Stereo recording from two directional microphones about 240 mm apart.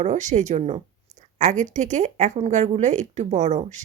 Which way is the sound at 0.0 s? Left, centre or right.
Right.